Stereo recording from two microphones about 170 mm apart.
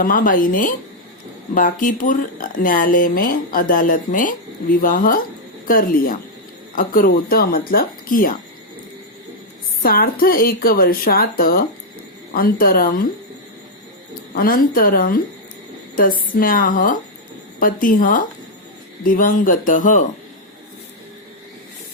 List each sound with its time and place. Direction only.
0.0 s speech: 55° left (ahead or behind)
9.8 s speech: 60° left (ahead or behind)
14.3 s speech: 55° left (ahead or behind)